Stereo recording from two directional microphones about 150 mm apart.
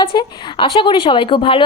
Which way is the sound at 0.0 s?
35° left (ahead or behind).